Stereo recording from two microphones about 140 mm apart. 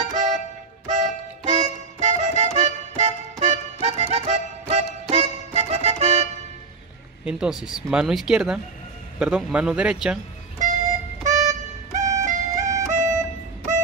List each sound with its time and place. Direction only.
0.1 s music: 60° right (ahead or behind)
7.2 s speech: 5° right (ahead or behind)
10.6 s music: 60° right (ahead or behind)